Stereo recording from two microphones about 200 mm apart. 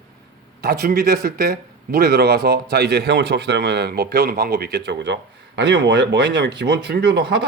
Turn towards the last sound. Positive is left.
turn(degrees=-60)  # may be behind; listen again after turning